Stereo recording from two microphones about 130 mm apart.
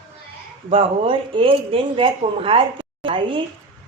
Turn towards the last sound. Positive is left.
turn(degrees=-40)  # may be behind; listen again after turning